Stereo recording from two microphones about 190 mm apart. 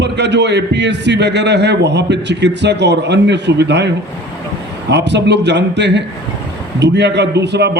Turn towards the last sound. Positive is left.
turn(degrees=-65)  # may be behind; listen again after turning